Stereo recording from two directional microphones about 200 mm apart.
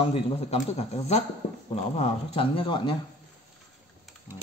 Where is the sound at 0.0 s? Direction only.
30° left (ahead or behind).